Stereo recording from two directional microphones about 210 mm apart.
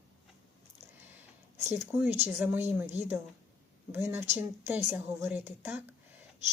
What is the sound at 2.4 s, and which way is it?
A woman's voice, 10° right (ahead or behind).